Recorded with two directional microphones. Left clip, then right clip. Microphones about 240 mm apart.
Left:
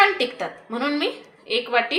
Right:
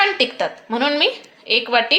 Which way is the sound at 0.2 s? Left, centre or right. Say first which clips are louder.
Right 6 dB; right.